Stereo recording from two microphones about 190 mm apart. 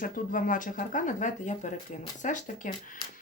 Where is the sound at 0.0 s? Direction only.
45° left (ahead or behind).